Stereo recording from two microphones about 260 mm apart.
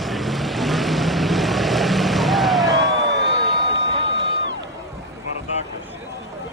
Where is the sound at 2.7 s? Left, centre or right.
Right.